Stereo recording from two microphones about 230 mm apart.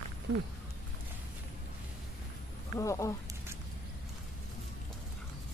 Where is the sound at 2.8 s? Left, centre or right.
Centre.